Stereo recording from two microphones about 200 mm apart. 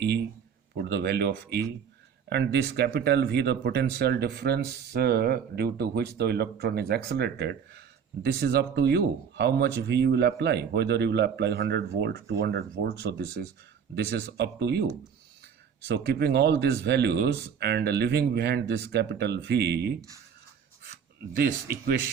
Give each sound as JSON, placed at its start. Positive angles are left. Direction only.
{"t": 0.8, "sound": "speech", "side_deg": -55}
{"t": 21.3, "sound": "speech", "side_deg": -50}